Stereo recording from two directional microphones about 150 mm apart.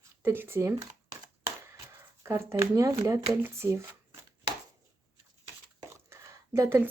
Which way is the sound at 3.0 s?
20° right (ahead or behind).